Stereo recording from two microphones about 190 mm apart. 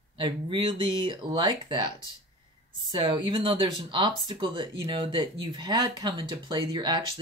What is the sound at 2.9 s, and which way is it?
Speech, 25° right (ahead or behind).